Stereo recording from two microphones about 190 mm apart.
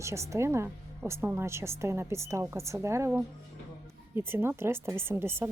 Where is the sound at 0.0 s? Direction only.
15° right (ahead or behind).